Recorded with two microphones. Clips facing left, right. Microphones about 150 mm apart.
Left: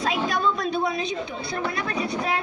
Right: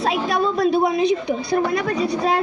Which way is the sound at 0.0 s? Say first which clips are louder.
Right 4 dB; 35° right (ahead or behind).